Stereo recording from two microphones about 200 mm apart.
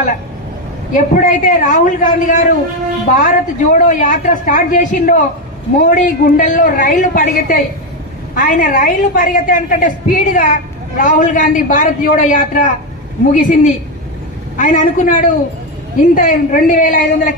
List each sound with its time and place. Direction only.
0.9 s a woman's voice: 40° left (ahead or behind)
14.6 s a woman's voice: 40° left (ahead or behind)